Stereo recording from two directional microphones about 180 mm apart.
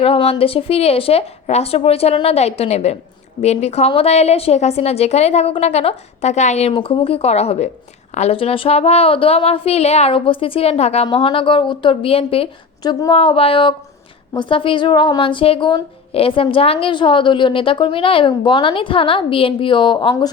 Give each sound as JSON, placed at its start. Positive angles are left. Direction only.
{"t": 0.0, "sound": "a woman's voice", "side_deg": 30}